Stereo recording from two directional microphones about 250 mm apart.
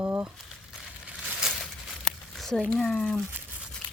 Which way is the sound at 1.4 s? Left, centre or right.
Centre.